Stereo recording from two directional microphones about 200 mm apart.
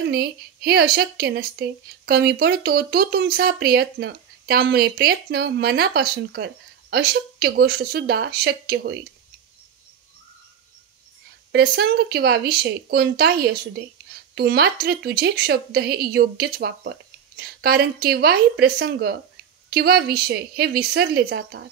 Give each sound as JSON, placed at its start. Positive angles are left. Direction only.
{"t": 0.1, "sound": "a woman's voice", "side_deg": -50}
{"t": 11.5, "sound": "a woman's voice", "side_deg": -50}